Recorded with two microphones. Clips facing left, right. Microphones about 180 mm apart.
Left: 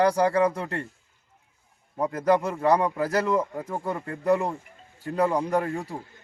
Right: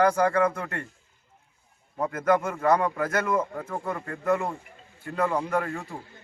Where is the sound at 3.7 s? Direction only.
30° left (ahead or behind).